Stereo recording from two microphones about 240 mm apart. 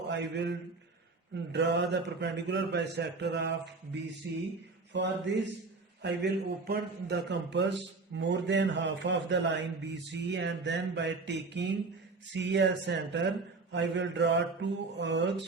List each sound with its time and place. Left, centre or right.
0.1 s a man's voice: right
4.9 s a man's voice: right